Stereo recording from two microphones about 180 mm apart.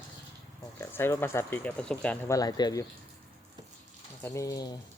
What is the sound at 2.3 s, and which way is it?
Speech, 20° left (ahead or behind).